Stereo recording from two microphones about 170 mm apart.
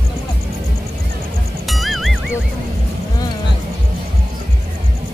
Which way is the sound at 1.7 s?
Centre (ahead or behind).